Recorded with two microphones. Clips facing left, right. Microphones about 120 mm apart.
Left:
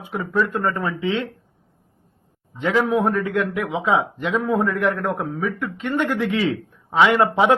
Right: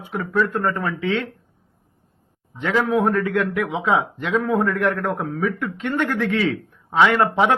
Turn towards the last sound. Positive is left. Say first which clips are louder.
# left 1 dB
turn(degrees=15)  # may be behind; listen again after turning